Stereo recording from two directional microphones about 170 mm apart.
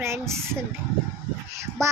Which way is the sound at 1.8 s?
15° right (ahead or behind).